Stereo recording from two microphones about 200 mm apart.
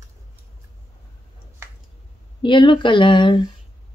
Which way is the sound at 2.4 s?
25° left (ahead or behind).